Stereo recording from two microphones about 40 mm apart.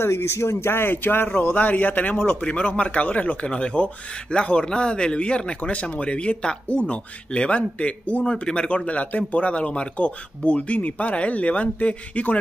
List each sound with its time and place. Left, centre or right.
0.6 s a man's voice: left
2.4 s speech: left
3.4 s speech: left